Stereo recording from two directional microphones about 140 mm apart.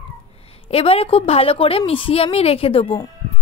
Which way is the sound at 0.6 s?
45° left (ahead or behind).